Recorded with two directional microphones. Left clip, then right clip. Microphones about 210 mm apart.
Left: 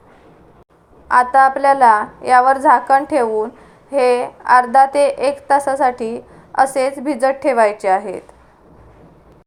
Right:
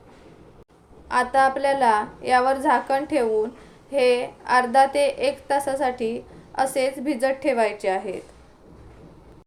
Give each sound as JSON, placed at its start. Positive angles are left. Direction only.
{"t": 1.0, "sound": "a woman's voice", "side_deg": -10}